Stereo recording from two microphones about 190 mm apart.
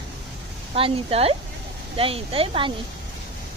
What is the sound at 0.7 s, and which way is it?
Speech, 30° right (ahead or behind).